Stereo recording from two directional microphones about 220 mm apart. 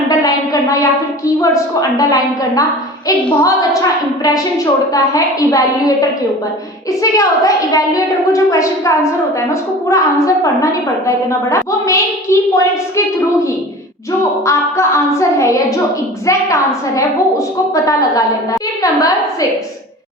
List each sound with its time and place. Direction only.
0.1 s a sound: 15° left (ahead or behind)
1.4 s a woman's voice: 15° left (ahead or behind)
14.4 s a woman's voice: 15° left (ahead or behind)
18.8 s a woman's voice: 15° left (ahead or behind)